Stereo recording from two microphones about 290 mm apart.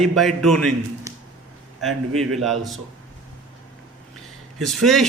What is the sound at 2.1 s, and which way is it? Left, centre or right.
Speech, right.